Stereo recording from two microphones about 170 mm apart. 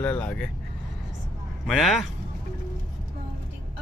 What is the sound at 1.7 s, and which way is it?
Speech, centre (ahead or behind).